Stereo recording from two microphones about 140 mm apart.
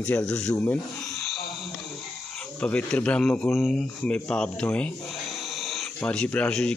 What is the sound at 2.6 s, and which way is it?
A man's voice, 10° left (ahead or behind).